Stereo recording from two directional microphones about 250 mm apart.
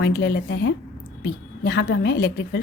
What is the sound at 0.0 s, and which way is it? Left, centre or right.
A woman's voice, left.